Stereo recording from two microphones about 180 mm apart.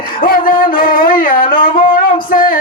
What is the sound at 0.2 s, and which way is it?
Music, 50° left (ahead or behind).